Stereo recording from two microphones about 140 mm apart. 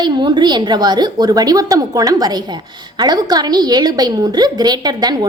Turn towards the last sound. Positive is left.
turn(degrees=-30)  # may be behind; listen again after turning